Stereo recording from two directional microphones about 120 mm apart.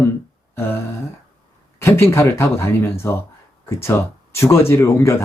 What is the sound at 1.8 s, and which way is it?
Speech, 20° left (ahead or behind).